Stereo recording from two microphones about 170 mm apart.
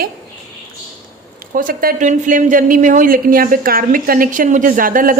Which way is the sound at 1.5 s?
55° right (ahead or behind).